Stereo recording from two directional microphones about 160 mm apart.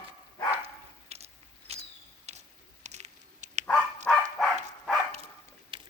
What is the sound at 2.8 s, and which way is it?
Patter, 45° right (ahead or behind).